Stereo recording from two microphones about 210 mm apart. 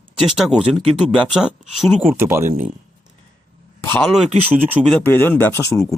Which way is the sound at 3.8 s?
10° left (ahead or behind).